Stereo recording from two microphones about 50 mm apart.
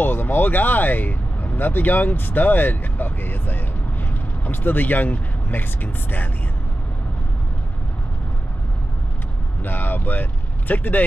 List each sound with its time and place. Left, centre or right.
0.0 s speech: left
9.6 s speech: left